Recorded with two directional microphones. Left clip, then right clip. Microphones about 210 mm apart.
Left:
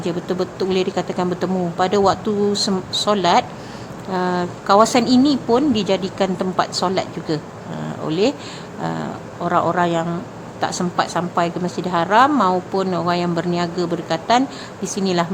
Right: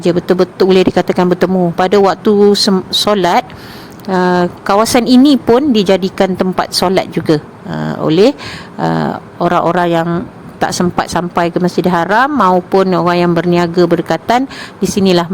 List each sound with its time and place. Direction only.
0.0 s a woman's voice: 30° right (ahead or behind)